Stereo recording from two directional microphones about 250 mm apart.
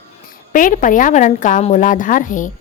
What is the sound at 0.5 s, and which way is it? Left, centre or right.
A woman's voice, left.